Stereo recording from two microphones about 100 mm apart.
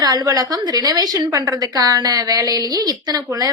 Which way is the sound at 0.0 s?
40° right (ahead or behind).